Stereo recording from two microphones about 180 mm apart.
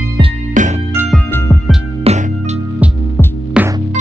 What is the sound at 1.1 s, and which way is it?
Music, 10° left (ahead or behind).